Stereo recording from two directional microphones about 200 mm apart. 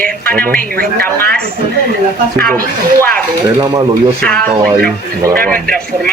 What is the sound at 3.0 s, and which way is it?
Speech, 5° left (ahead or behind).